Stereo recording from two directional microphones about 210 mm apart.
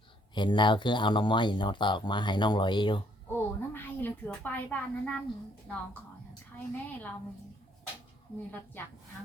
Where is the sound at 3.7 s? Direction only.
10° left (ahead or behind).